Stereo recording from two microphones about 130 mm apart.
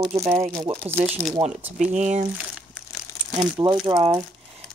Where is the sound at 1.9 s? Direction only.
65° right (ahead or behind).